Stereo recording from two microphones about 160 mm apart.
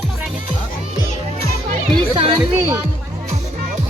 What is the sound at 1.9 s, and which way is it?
Music, 30° right (ahead or behind).